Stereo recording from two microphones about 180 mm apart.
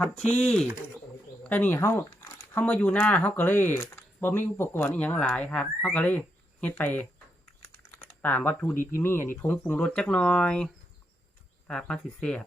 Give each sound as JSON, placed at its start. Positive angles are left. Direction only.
{"t": 0.0, "sound": "speech", "side_deg": 5}
{"t": 7.9, "sound": "a sound", "side_deg": 10}
{"t": 9.0, "sound": "speech", "side_deg": 15}
{"t": 11.7, "sound": "speech", "side_deg": 5}